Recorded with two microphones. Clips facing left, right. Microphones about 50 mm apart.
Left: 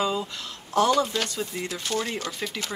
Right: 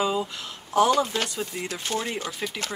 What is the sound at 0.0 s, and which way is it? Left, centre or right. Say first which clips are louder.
Speech: right 1 dB; centre.